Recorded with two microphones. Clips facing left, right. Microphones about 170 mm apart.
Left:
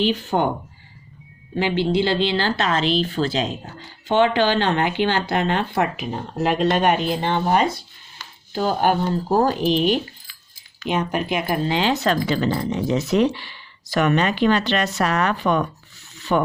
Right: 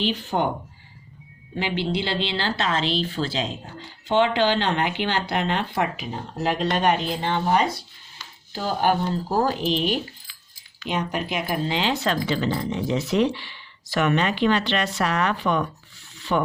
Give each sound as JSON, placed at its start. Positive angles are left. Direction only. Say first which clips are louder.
{"t": 0.0, "sound": "speech", "louder": "left 4 dB", "side_deg": 50}
{"t": 1.5, "sound": "speech", "louder": "left 6 dB", "side_deg": 50}